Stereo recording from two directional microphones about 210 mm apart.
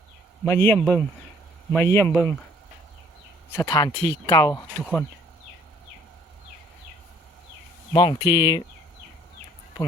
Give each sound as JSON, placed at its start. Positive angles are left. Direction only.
{"t": 0.4, "sound": "speech", "side_deg": 10}
{"t": 3.5, "sound": "speech", "side_deg": 15}
{"t": 4.8, "sound": "speech", "side_deg": 5}
{"t": 7.9, "sound": "speech", "side_deg": 20}